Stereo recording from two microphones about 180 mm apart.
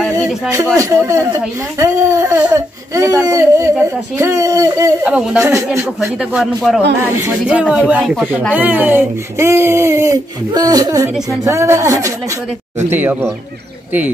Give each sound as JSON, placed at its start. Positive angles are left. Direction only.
{"t": 0.0, "sound": "a sound", "side_deg": 0}
{"t": 0.7, "sound": "speech", "side_deg": -15}
{"t": 5.0, "sound": "speech", "side_deg": -5}
{"t": 5.4, "sound": "speech", "side_deg": -15}
{"t": 5.9, "sound": "speech", "side_deg": -5}